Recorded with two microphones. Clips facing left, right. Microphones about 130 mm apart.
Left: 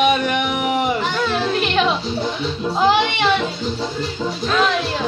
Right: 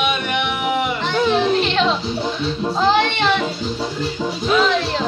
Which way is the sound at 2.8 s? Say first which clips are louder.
Left 1 dB; 10° left (ahead or behind).